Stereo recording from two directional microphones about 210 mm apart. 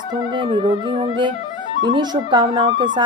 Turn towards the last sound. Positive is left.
turn(degrees=-20)  # may be behind; listen again after turning